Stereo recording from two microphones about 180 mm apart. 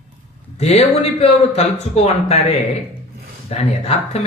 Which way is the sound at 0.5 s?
35° left (ahead or behind).